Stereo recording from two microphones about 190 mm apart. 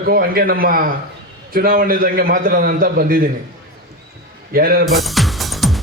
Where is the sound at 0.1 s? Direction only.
50° right (ahead or behind).